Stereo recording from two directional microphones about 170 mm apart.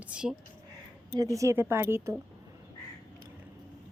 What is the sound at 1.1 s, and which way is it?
Speech, 20° right (ahead or behind).